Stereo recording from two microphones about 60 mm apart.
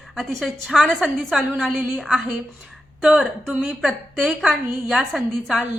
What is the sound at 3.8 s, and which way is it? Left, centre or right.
A woman's voice, centre.